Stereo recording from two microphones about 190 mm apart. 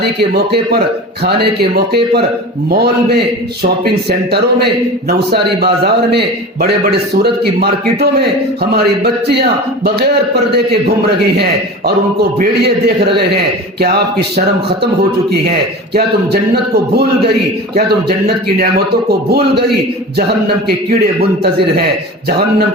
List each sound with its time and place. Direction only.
0.2 s a man's voice: 55° right (ahead or behind)
12.4 s a man's voice: 60° right (ahead or behind)
15.9 s a man's voice: 55° right (ahead or behind)